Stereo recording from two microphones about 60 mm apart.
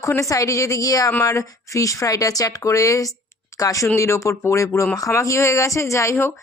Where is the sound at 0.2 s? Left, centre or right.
Left.